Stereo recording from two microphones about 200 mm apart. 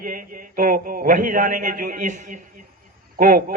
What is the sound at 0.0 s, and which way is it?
A man's voice, 45° right (ahead or behind).